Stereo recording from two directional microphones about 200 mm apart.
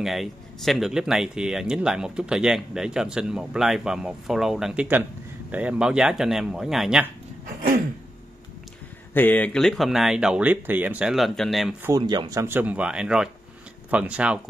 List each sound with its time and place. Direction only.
0.0 s speech: centre (ahead or behind)
7.4 s a sound: 45° right (ahead or behind)
9.1 s speech: 10° left (ahead or behind)
11.8 s speech: 20° right (ahead or behind)